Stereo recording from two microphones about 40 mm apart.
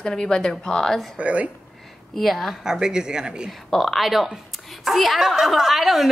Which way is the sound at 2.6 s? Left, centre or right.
Centre.